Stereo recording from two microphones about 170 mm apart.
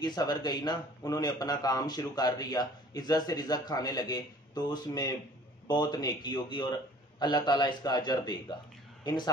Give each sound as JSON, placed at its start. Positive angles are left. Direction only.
{"t": 0.0, "sound": "a man's voice", "side_deg": 25}